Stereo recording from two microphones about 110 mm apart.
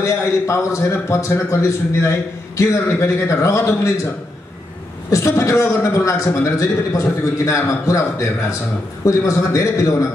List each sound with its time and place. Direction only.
0.0 s a man's voice: 25° left (ahead or behind)
5.1 s a man's voice: 25° left (ahead or behind)